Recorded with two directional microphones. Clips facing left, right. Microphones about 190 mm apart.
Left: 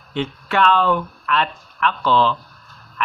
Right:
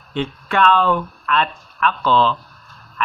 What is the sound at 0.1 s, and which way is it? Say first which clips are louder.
A man's voice: right 1 dB; 15° left (ahead or behind).